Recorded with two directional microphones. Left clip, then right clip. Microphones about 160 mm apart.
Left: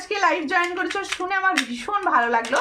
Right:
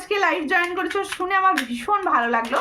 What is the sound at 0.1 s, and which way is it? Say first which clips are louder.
A woman's voice: even; 15° right (ahead or behind).